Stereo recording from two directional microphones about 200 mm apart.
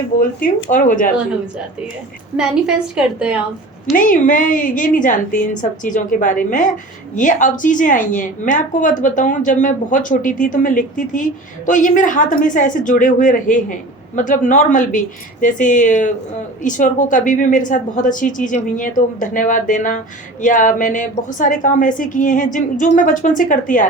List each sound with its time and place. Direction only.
0.2 s speech: 45° left (ahead or behind)
2.3 s a woman's voice: 5° right (ahead or behind)
3.9 s a woman's voice: 40° left (ahead or behind)